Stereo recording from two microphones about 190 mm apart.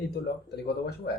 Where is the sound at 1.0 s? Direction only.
60° left (ahead or behind).